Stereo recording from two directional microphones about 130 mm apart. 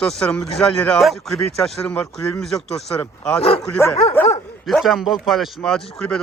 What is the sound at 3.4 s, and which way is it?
Speech, 50° left (ahead or behind).